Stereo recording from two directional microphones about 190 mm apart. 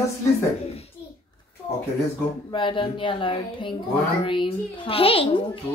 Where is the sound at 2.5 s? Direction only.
25° left (ahead or behind).